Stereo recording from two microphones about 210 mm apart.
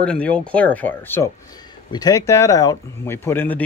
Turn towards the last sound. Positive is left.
turn(degrees=10)  # may be behind; listen again after turning